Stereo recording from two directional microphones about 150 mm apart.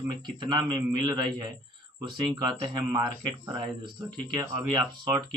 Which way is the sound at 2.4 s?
25° right (ahead or behind).